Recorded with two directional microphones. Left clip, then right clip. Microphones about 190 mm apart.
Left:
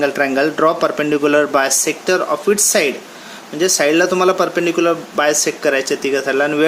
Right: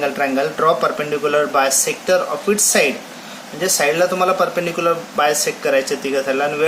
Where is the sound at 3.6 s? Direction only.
50° left (ahead or behind).